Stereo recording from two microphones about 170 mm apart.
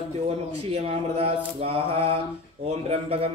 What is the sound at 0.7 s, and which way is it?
A man's voice, 40° right (ahead or behind).